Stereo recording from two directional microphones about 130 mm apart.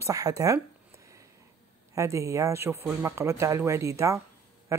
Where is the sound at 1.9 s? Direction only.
25° right (ahead or behind).